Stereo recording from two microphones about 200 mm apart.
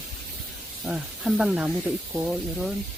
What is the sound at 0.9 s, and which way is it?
Speech, 5° right (ahead or behind).